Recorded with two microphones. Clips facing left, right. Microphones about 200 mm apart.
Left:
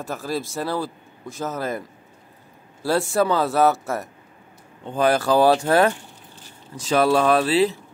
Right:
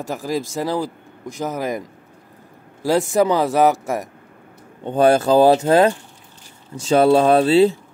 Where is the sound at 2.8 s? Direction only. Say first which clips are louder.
Right 4 dB; 15° right (ahead or behind).